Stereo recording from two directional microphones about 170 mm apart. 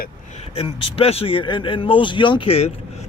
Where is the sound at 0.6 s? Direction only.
35° left (ahead or behind).